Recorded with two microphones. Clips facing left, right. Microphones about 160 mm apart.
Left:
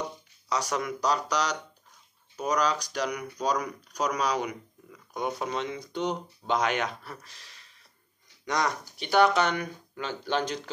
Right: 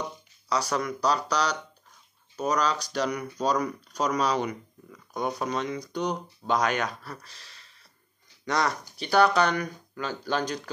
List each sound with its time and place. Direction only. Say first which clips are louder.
0.5 s speech: right 2 dB; 20° left (ahead or behind)
5.4 s speech: right 2 dB; 20° left (ahead or behind)